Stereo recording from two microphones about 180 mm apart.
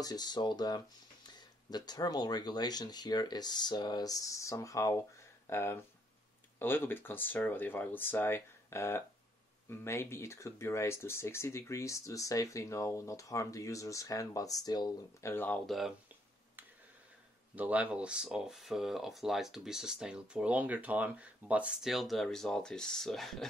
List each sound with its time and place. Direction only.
0.0 s speech: 20° left (ahead or behind); by 15.9 s centre (ahead or behind)
17.6 s speech: 10° right (ahead or behind)